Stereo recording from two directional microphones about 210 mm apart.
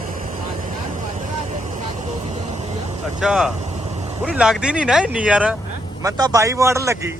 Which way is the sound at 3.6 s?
30° right (ahead or behind).